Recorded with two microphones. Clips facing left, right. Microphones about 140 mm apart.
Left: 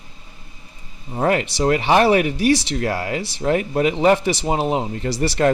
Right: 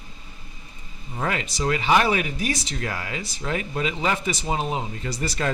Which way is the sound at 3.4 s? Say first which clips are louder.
Left 9 dB; 55° left (ahead or behind).